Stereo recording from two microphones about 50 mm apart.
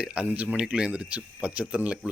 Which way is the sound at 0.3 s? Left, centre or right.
Right.